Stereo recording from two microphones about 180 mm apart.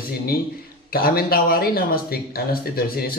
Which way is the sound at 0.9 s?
55° left (ahead or behind).